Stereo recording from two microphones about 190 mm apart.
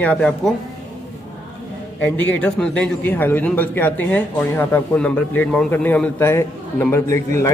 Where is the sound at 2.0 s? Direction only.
5° left (ahead or behind).